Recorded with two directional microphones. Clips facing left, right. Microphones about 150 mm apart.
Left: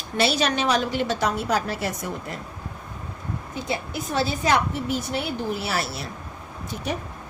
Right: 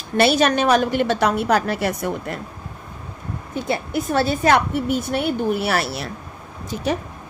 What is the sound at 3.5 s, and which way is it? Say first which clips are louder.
A woman's voice: right 7 dB; 55° right (ahead or behind).